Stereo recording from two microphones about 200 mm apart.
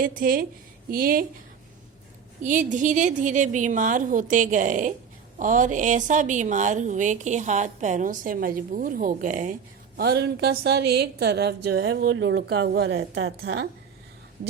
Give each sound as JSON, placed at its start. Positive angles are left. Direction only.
{"t": 0.0, "sound": "a woman's voice", "side_deg": -45}
{"t": 2.4, "sound": "a woman's voice", "side_deg": -40}
{"t": 10.0, "sound": "a woman's voice", "side_deg": -55}
{"t": 12.0, "sound": "speech", "side_deg": -65}